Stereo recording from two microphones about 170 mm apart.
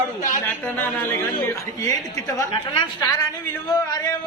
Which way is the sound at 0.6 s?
10° left (ahead or behind).